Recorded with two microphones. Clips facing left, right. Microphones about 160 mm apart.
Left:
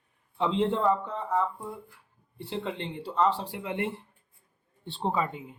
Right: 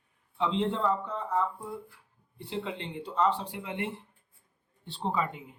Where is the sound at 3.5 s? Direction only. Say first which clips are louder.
Left 3 dB; 45° left (ahead or behind).